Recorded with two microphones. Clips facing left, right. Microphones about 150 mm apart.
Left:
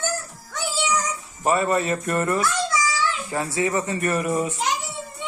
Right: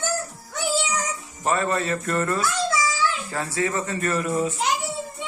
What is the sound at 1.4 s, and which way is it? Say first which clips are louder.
Speech: left 3 dB; 10° left (ahead or behind).